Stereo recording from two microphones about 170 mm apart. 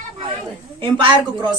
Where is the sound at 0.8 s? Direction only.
30° right (ahead or behind).